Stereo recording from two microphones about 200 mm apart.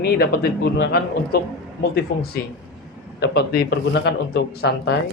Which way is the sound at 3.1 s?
50° left (ahead or behind).